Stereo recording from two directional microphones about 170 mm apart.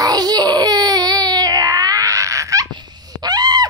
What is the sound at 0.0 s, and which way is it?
Baby cry, 25° right (ahead or behind).